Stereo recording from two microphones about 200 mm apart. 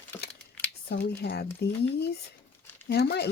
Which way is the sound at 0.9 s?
55° left (ahead or behind).